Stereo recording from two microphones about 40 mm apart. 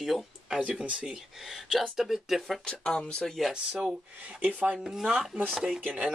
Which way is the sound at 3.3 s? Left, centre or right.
Centre.